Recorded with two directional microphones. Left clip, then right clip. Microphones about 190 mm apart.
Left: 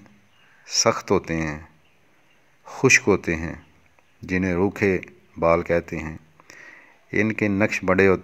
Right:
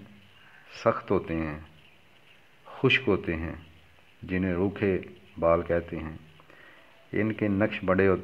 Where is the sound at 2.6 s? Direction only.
45° left (ahead or behind).